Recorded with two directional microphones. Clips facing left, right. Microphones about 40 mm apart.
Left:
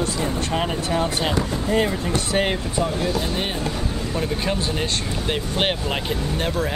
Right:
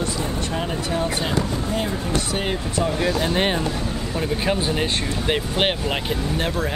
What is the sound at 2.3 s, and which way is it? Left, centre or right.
Speech, left.